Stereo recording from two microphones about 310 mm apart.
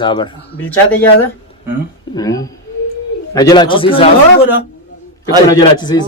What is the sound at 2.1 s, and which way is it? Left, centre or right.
Speech, centre.